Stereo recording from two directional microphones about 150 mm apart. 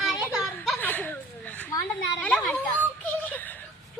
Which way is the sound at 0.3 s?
5° right (ahead or behind).